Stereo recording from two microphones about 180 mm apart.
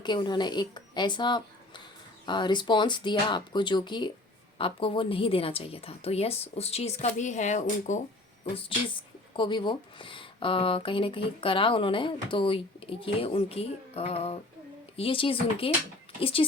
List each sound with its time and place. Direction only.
0.0 s a woman's voice: 25° left (ahead or behind); by 8.0 s 40° left (ahead or behind)
8.5 s a woman's voice: 25° left (ahead or behind)